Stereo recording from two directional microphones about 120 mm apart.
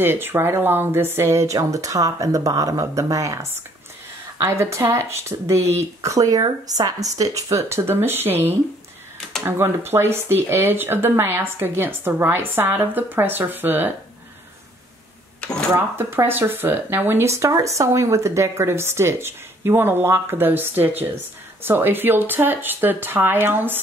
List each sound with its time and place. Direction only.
0.0 s speech: 20° right (ahead or behind)
15.7 s speech: 20° right (ahead or behind)